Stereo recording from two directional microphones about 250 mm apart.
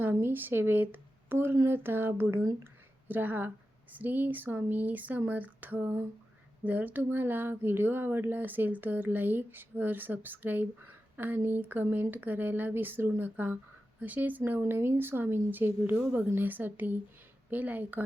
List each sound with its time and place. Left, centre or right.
0.0 s speech: centre